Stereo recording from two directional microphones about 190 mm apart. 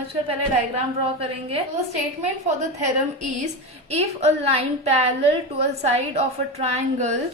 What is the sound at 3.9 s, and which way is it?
A woman's voice, 35° right (ahead or behind).